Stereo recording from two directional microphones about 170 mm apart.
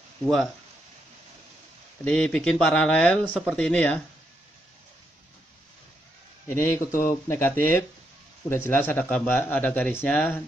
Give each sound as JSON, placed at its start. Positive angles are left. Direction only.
{"t": 0.2, "sound": "speech", "side_deg": 0}
{"t": 2.0, "sound": "speech", "side_deg": 5}
{"t": 6.5, "sound": "speech", "side_deg": 15}